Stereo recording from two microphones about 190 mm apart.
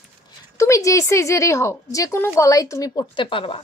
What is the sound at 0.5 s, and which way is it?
A woman's voice, 15° left (ahead or behind).